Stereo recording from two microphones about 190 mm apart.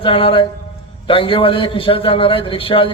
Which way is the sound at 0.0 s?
30° left (ahead or behind).